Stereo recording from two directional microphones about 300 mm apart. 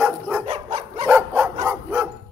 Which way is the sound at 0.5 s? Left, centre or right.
Centre.